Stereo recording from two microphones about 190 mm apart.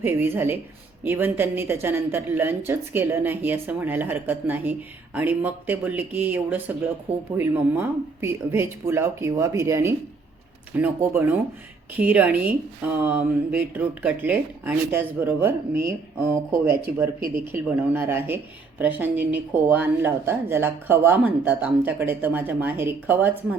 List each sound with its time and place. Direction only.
0.0 s speech: 10° right (ahead or behind)
17.2 s speech: 50° right (ahead or behind)
17.5 s speech: 10° right (ahead or behind)